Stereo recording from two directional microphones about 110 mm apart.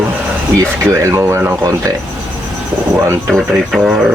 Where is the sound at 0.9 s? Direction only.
25° right (ahead or behind).